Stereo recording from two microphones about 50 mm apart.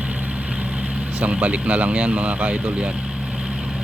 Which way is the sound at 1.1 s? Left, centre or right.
Right.